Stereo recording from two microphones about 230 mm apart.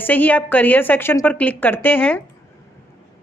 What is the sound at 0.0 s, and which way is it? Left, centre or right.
A woman's voice, centre.